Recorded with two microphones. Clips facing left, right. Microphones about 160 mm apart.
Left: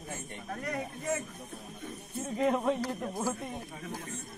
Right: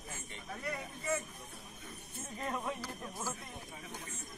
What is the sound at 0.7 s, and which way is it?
Speech, 60° left (ahead or behind).